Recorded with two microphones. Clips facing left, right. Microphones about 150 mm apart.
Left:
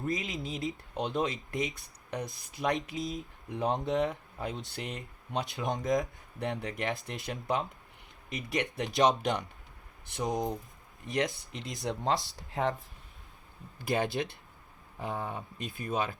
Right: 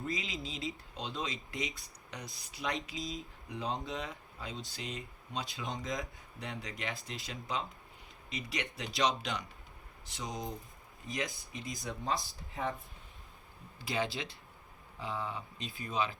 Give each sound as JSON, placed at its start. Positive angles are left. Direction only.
{"t": 0.0, "sound": "speech", "side_deg": 50}
{"t": 10.2, "sound": "speech", "side_deg": 20}
{"t": 11.5, "sound": "speech", "side_deg": 75}
{"t": 13.7, "sound": "speech", "side_deg": 50}